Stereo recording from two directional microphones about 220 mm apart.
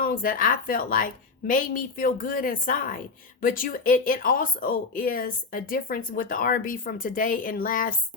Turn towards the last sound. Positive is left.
turn(degrees=40)  # may be behind; listen again after turning